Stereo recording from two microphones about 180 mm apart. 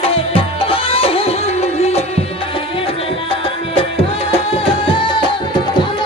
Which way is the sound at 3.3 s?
30° left (ahead or behind).